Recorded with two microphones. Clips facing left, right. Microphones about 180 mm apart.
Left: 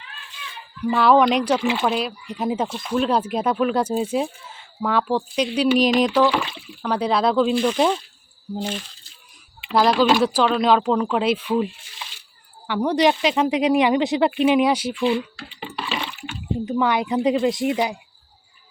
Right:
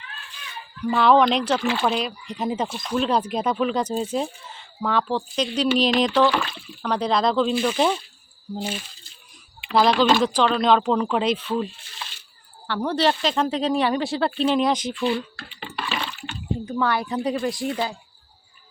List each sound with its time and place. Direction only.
0.8 s speech: 5° left (ahead or behind)
1.8 s speech: 5° left (ahead or behind)
7.5 s speech: 5° right (ahead or behind)
9.6 s speech: 10° left (ahead or behind)